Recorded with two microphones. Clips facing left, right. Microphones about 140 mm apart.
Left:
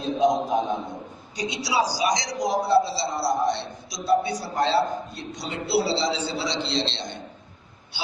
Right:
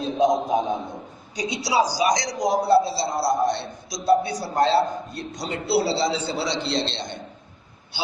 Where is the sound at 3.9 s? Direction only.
45° right (ahead or behind).